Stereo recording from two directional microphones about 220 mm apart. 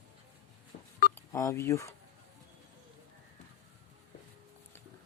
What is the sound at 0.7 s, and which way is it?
Telephone dialing, 30° left (ahead or behind).